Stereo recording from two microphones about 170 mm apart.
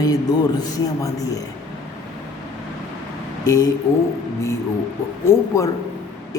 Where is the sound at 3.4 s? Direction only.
20° left (ahead or behind).